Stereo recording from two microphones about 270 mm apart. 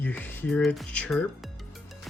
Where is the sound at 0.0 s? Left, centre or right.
Centre.